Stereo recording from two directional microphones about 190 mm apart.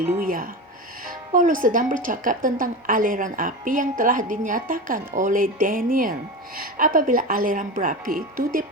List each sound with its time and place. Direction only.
0.3 s speech: 45° right (ahead or behind)